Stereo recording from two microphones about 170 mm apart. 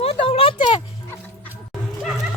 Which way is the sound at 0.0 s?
35° left (ahead or behind).